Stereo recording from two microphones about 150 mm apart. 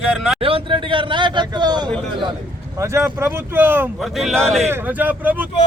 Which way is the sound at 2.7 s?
20° right (ahead or behind).